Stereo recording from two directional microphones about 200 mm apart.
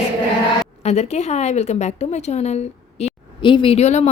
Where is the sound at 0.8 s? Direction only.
35° left (ahead or behind).